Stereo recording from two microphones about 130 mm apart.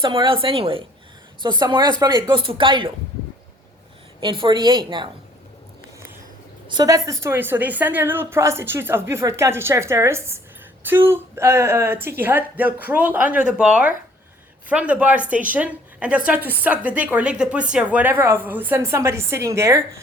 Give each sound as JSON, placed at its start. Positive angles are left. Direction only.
{"t": 0.0, "sound": "a woman's voice", "side_deg": -40}
{"t": 4.2, "sound": "speech", "side_deg": -35}
{"t": 6.7, "sound": "a woman's voice", "side_deg": -30}